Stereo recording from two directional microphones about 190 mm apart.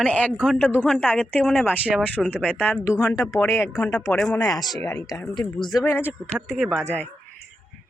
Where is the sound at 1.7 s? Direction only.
5° right (ahead or behind).